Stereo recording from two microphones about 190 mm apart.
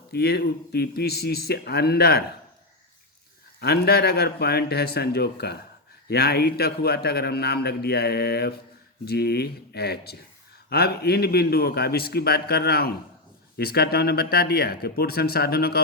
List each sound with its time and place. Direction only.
0.1 s a man's voice: 55° left (ahead or behind)
3.6 s a man's voice: 55° left (ahead or behind)